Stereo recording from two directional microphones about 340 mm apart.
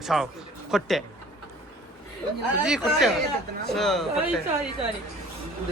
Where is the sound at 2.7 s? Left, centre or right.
Centre.